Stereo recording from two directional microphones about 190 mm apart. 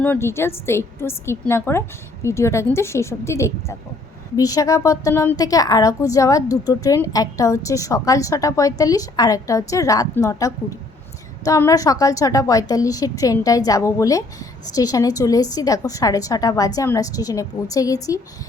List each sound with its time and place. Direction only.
0.0 s a woman's voice: 10° left (ahead or behind)